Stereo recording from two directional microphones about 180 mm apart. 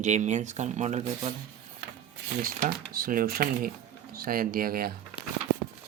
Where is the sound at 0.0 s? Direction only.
40° right (ahead or behind).